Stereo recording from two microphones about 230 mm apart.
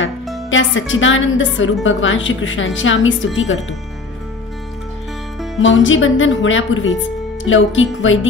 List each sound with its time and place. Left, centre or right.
0.5 s a woman's voice: left
5.6 s a woman's voice: left